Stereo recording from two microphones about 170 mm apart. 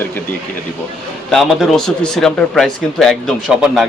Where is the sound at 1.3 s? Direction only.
Centre (ahead or behind).